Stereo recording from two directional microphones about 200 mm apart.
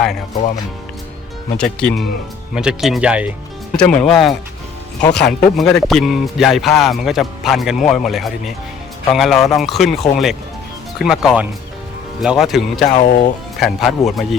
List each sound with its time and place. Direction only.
1.5 s speech: 5° left (ahead or behind)
3.8 s speech: 5° left (ahead or behind)
12.8 s speech: 40° left (ahead or behind)
13.6 s speech: centre (ahead or behind)